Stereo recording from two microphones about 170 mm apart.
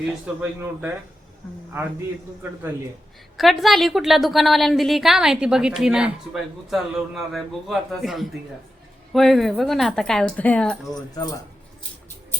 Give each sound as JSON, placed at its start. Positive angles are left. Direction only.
{"t": 0.6, "sound": "a man's voice", "side_deg": -10}
{"t": 3.3, "sound": "a woman's voice", "side_deg": 0}
{"t": 10.9, "sound": "speech", "side_deg": 25}